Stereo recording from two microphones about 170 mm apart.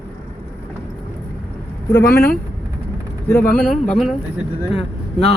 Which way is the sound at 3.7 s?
5° left (ahead or behind).